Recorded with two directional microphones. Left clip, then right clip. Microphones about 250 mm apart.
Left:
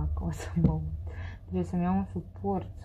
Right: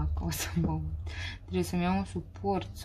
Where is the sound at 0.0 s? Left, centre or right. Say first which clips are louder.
Right 3 dB; right.